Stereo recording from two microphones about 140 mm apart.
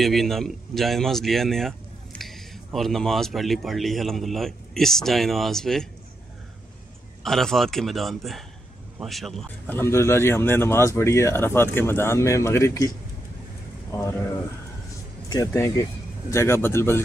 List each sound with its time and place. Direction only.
0.0 s speech: centre (ahead or behind)
7.2 s speech: centre (ahead or behind)
9.7 s speech: 15° left (ahead or behind)
15.4 s a man's voice: 20° left (ahead or behind)